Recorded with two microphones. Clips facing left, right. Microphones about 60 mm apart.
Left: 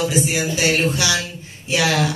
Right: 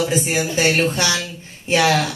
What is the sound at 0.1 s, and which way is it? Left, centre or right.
Speech, right.